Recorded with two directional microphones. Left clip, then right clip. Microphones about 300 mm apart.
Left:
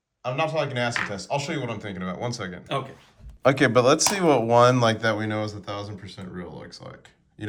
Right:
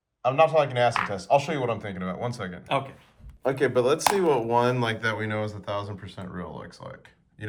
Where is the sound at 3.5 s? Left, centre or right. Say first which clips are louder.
Left 4 dB; left; by 7.4 s centre.